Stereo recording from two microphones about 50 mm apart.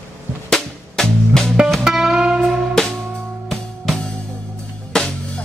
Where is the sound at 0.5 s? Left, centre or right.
Centre.